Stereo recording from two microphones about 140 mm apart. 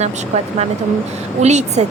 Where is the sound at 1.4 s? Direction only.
55° right (ahead or behind).